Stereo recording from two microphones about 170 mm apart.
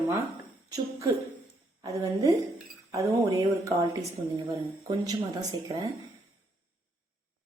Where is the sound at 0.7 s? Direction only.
20° right (ahead or behind).